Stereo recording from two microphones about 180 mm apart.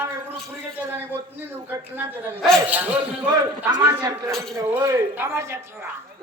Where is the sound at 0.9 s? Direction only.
10° right (ahead or behind).